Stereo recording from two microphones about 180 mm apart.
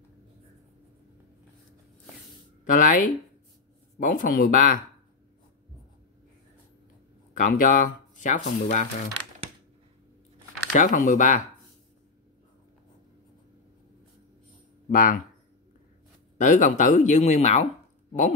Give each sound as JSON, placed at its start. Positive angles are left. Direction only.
{"t": 2.6, "sound": "speech", "side_deg": 45}
{"t": 7.3, "sound": "speech", "side_deg": 50}
{"t": 10.7, "sound": "speech", "side_deg": 45}
{"t": 14.9, "sound": "speech", "side_deg": 50}
{"t": 16.3, "sound": "speech", "side_deg": 45}